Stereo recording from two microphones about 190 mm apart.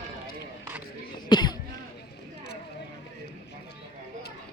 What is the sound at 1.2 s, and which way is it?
Cough, 20° left (ahead or behind).